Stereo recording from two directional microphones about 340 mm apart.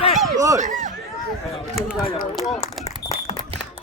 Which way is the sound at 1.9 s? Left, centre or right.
Centre.